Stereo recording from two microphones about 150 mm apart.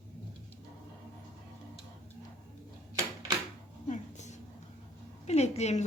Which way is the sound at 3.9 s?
50° left (ahead or behind).